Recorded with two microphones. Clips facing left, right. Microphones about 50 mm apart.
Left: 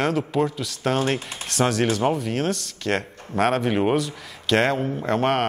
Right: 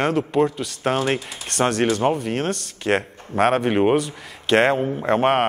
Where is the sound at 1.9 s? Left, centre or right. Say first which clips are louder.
Right 2 dB; centre.